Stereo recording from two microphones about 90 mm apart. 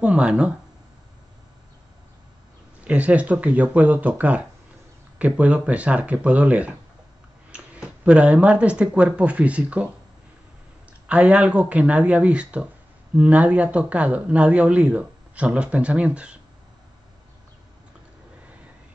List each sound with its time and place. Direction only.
0.0 s speech: 10° right (ahead or behind)
2.8 s speech: 15° right (ahead or behind)
11.1 s speech: 15° right (ahead or behind)